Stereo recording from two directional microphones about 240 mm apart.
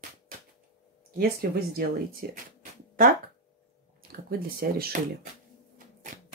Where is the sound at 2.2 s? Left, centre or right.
Right.